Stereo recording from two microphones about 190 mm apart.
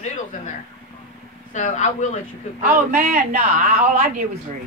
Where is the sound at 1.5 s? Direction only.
40° left (ahead or behind).